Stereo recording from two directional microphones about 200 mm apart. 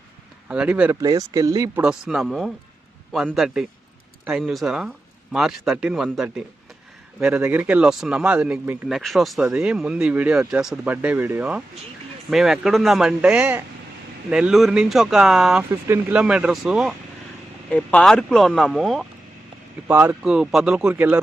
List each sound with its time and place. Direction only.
0.4 s speech: 5° right (ahead or behind)
1.8 s speech: 5° right (ahead or behind)
19.9 s speech: 10° right (ahead or behind)